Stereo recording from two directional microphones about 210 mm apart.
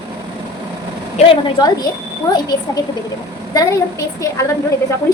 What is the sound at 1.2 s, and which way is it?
A woman's voice, 20° left (ahead or behind).